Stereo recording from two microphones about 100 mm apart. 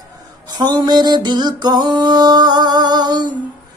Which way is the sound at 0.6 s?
45° right (ahead or behind).